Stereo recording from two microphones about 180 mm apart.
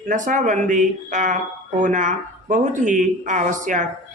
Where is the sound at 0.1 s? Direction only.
45° right (ahead or behind).